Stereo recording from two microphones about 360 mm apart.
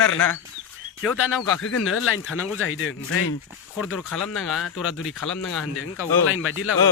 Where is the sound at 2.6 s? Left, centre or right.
Left.